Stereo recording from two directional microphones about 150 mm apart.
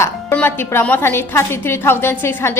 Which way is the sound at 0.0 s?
15° left (ahead or behind).